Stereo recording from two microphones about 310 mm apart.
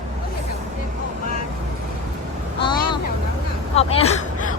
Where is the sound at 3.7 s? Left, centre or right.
Centre.